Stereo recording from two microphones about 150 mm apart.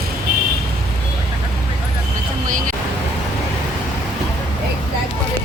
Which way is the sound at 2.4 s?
65° right (ahead or behind).